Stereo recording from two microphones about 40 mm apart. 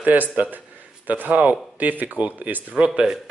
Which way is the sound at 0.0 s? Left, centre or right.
Right.